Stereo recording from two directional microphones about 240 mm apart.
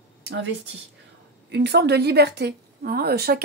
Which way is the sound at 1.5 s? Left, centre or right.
Right.